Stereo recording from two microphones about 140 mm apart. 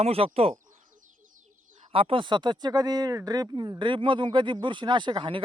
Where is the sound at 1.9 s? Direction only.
40° right (ahead or behind).